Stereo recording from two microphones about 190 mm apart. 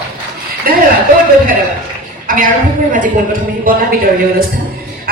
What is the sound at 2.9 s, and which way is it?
Speech, 45° right (ahead or behind).